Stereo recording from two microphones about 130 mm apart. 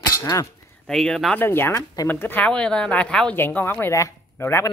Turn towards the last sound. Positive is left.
turn(degrees=20)  # may be behind; listen again after turning